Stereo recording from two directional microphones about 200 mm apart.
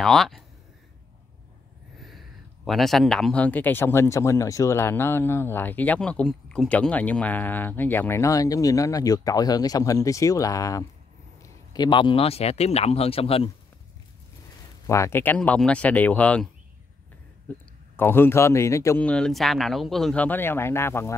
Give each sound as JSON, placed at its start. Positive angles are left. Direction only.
{"t": 0.0, "sound": "speech", "side_deg": 0}
{"t": 2.0, "sound": "speech", "side_deg": 0}
{"t": 14.9, "sound": "speech", "side_deg": 15}
{"t": 17.5, "sound": "speech", "side_deg": 5}